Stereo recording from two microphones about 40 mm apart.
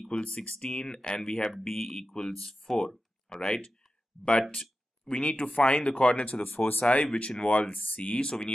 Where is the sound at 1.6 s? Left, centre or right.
Centre.